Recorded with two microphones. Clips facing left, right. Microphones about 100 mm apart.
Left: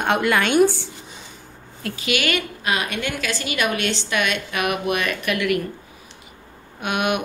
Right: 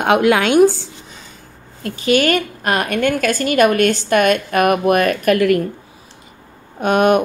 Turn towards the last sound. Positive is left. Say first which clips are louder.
# right 9 dB
turn(degrees=-40)  # may be behind; listen again after turning